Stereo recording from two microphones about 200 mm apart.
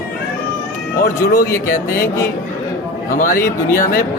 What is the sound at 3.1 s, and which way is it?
Speech, 45° left (ahead or behind).